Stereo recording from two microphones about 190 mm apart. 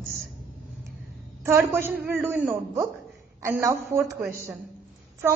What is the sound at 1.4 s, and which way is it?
A woman's voice, 10° right (ahead or behind).